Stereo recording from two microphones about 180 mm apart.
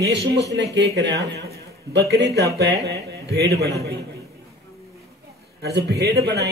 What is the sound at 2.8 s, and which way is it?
Carnatic music, 70° right (ahead or behind).